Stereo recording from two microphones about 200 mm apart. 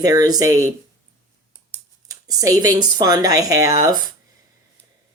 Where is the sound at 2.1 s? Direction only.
20° right (ahead or behind).